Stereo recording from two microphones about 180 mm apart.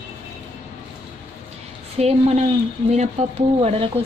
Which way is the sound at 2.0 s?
35° right (ahead or behind).